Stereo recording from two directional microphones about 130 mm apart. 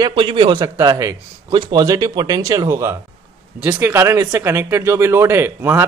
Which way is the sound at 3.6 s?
15° right (ahead or behind).